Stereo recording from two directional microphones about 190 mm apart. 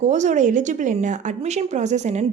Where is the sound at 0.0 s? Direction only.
40° right (ahead or behind).